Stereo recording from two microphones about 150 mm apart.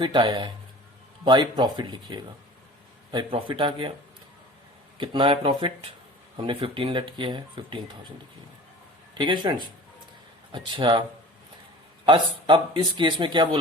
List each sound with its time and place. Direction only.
0.0 s speech: 30° right (ahead or behind)
4.9 s speech: 35° right (ahead or behind)
9.1 s speech: 30° right (ahead or behind)
12.0 s speech: 35° right (ahead or behind)